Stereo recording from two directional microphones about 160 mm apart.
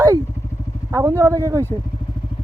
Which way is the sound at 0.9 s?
15° right (ahead or behind).